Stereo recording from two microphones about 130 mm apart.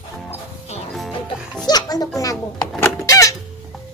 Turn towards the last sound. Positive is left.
turn(degrees=25)  # may be behind; listen again after turning